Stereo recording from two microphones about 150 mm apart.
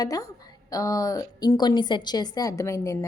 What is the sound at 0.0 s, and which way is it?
A woman's voice, 25° left (ahead or behind).